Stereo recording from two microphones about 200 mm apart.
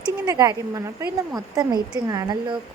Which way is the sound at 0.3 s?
15° right (ahead or behind).